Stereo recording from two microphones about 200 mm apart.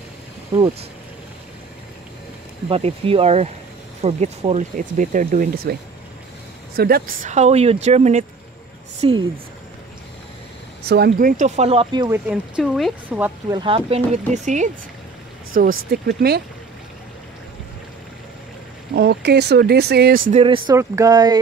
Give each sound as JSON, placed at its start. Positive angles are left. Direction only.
{"t": 2.7, "sound": "speech", "side_deg": -30}
{"t": 6.8, "sound": "speech", "side_deg": -50}
{"t": 7.2, "sound": "speech", "side_deg": -35}
{"t": 10.9, "sound": "speech", "side_deg": -55}
{"t": 12.3, "sound": "speech", "side_deg": -5}
{"t": 13.5, "sound": "speech", "side_deg": -25}
{"t": 18.9, "sound": "speech", "side_deg": -55}
{"t": 20.4, "sound": "speech", "side_deg": -25}
{"t": 20.7, "sound": "speech", "side_deg": -15}